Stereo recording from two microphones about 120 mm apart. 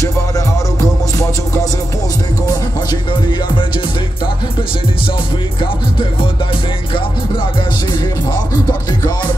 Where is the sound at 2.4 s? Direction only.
35° left (ahead or behind).